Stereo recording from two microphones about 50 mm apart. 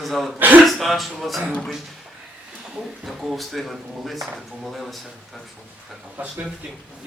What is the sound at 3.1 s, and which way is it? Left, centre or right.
Speech, centre.